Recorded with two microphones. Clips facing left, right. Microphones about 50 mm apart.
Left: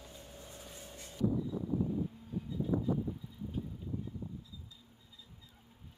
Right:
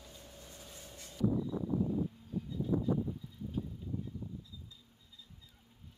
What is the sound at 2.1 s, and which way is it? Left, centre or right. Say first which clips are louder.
Vehicle: even; centre.